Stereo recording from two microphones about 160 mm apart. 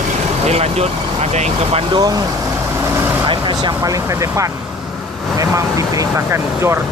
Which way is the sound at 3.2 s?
30° right (ahead or behind).